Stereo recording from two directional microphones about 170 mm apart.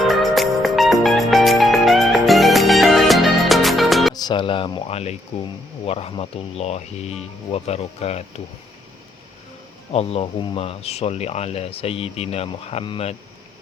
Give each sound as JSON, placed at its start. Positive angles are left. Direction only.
{"t": 0.0, "sound": "music", "side_deg": 0}
{"t": 4.1, "sound": "speech", "side_deg": 25}
{"t": 9.9, "sound": "speech", "side_deg": 35}